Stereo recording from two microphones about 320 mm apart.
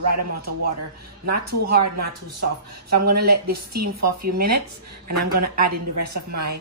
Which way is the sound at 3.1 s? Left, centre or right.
Right.